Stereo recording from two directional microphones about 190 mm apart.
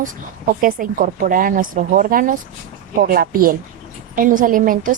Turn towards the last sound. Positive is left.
turn(degrees=-45)  # may be behind; listen again after turning